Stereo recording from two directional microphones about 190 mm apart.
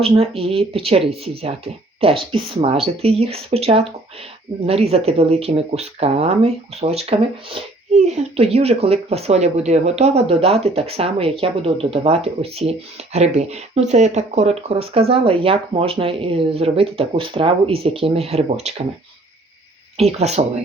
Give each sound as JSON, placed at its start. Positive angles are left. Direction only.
{"t": 0.0, "sound": "speech", "side_deg": -30}
{"t": 20.0, "sound": "speech", "side_deg": -35}